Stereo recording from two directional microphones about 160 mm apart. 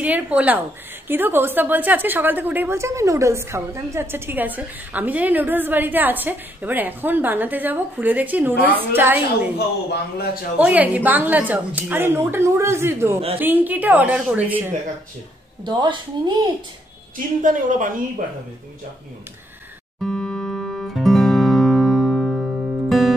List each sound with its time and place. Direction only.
0.0 s a woman's voice: 10° right (ahead or behind)
10.6 s a woman's voice: 10° right (ahead or behind)
15.6 s speech: 30° right (ahead or behind)
17.4 s speech: 55° right (ahead or behind)
20.0 s music: 5° left (ahead or behind)